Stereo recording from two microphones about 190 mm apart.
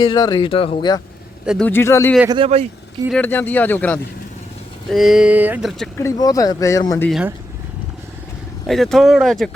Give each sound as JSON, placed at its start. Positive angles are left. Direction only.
{"t": 0.0, "sound": "speech", "side_deg": 25}
{"t": 1.5, "sound": "speech", "side_deg": 5}
{"t": 2.3, "sound": "speech", "side_deg": -30}
{"t": 3.1, "sound": "speech", "side_deg": 10}
{"t": 6.0, "sound": "speech", "side_deg": 15}
{"t": 7.1, "sound": "speech", "side_deg": -5}
{"t": 8.6, "sound": "speech", "side_deg": 0}